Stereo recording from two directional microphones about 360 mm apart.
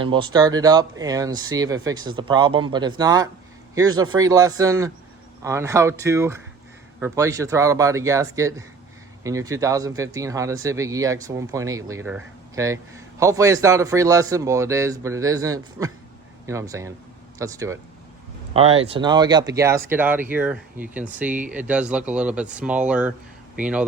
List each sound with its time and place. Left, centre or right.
0.0 s speech: centre